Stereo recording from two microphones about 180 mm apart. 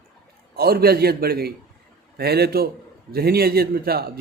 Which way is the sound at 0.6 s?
60° right (ahead or behind).